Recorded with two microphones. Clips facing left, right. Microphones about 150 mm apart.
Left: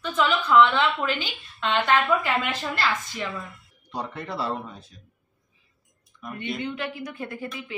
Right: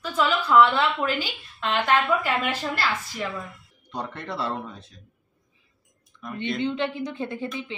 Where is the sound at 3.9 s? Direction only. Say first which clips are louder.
Even; 5° left (ahead or behind).